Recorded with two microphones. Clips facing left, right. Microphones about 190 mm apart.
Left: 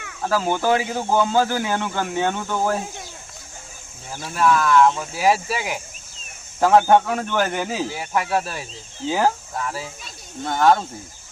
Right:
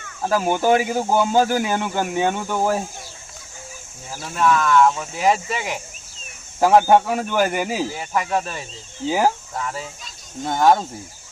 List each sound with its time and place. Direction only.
0.3 s speech: 15° right (ahead or behind)
4.1 s speech: centre (ahead or behind)
6.6 s speech: 10° right (ahead or behind)
7.9 s speech: 5° left (ahead or behind)
9.0 s speech: 10° right (ahead or behind)
9.6 s speech: 5° left (ahead or behind)
10.4 s speech: 15° right (ahead or behind)